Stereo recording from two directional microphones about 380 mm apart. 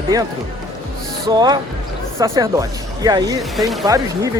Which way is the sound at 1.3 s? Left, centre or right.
Centre.